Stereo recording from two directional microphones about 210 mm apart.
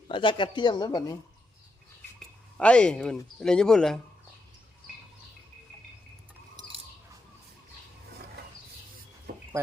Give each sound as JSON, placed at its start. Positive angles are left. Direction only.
{"t": 0.1, "sound": "speech", "side_deg": 25}
{"t": 2.1, "sound": "speech", "side_deg": 5}